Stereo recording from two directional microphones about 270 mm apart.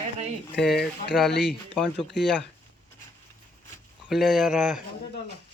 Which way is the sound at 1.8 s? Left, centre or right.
Centre.